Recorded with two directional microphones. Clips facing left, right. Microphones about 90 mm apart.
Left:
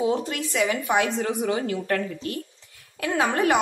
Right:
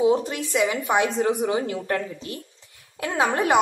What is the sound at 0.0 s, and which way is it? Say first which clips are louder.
A woman's voice: right 4 dB; 20° right (ahead or behind).